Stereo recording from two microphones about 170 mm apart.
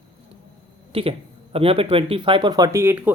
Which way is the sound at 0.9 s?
35° right (ahead or behind).